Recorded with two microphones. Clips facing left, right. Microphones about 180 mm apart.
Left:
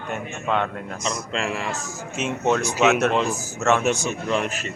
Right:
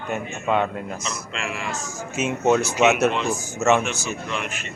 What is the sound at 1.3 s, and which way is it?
Speech, 35° left (ahead or behind).